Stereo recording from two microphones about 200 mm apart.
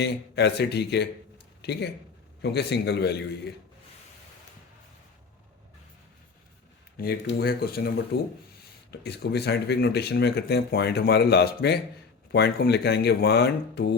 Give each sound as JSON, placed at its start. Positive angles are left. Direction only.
{"t": 0.0, "sound": "speech", "side_deg": 55}
{"t": 6.9, "sound": "speech", "side_deg": 50}